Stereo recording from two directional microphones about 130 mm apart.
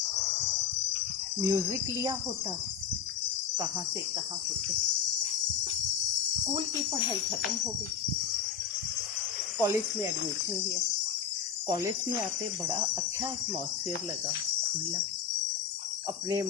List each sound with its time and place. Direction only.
1.4 s speech: 25° right (ahead or behind)
9.6 s speech: 20° right (ahead or behind)
11.7 s speech: 25° right (ahead or behind)